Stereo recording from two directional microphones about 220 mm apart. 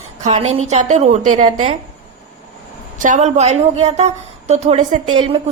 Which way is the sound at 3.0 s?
35° right (ahead or behind).